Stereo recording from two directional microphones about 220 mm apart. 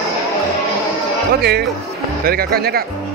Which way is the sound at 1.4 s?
45° right (ahead or behind).